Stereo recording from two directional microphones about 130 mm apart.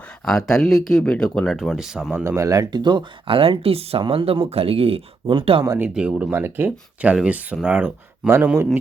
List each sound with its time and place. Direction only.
0.3 s speech: 5° left (ahead or behind)
1.5 s speech: 5° right (ahead or behind)
2.2 s speech: 25° right (ahead or behind); by 5.6 s 45° right (ahead or behind)
5.8 s speech: 10° right (ahead or behind)